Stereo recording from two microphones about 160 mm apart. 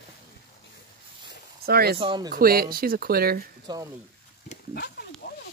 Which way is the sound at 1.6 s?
75° right (ahead or behind).